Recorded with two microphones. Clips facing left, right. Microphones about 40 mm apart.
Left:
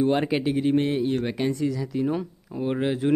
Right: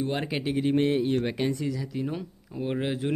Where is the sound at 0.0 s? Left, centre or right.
Centre.